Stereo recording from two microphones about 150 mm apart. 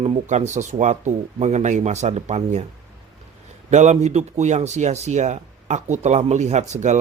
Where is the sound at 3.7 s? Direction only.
50° right (ahead or behind).